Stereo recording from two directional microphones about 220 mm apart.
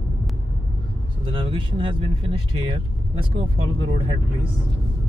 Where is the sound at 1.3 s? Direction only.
25° right (ahead or behind).